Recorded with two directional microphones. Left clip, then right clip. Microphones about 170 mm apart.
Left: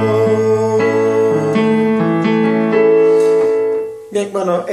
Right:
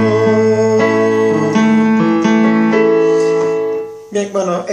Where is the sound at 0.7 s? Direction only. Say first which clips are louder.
Right 1 dB; 35° right (ahead or behind).